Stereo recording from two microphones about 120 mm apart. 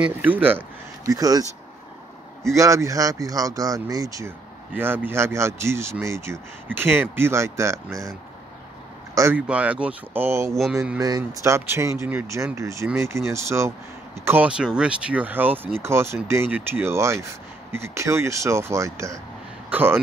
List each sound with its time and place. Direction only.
0.0 s speech: 15° right (ahead or behind)
1.0 s speech: 30° right (ahead or behind)
2.4 s speech: 25° right (ahead or behind)
4.7 s speech: 15° right (ahead or behind)
9.1 s speech: 25° right (ahead or behind)
9.5 s speech: 10° right (ahead or behind)